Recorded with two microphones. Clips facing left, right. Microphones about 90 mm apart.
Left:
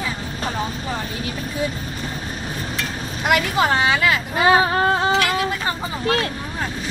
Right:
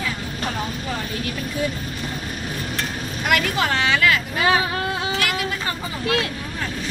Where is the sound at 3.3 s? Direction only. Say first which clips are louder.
Left 3 dB; 25° left (ahead or behind).